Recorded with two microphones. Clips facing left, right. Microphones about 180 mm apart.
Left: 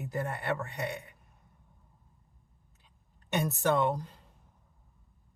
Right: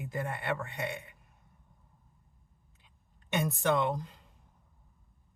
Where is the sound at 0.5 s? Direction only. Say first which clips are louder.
Left 1 dB; 40° left (ahead or behind).